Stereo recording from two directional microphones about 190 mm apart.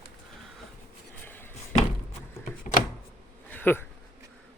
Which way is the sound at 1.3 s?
10° left (ahead or behind).